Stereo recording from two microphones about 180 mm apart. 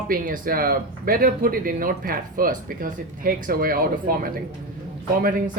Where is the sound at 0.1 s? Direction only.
55° right (ahead or behind).